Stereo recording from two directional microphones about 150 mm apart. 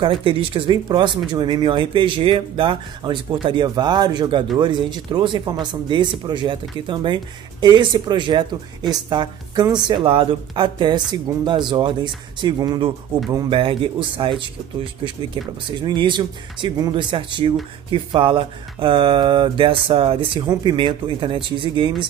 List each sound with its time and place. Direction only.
0.0 s speech: 35° right (ahead or behind)
15.8 s speech: 30° right (ahead or behind)